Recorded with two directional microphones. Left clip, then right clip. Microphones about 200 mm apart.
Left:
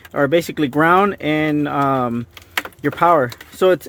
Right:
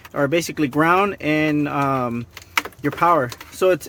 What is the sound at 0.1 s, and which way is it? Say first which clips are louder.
Speech: left 4 dB; 30° left (ahead or behind).